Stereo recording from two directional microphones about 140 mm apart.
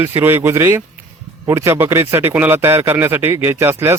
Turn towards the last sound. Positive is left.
turn(degrees=-15)  # may be behind; listen again after turning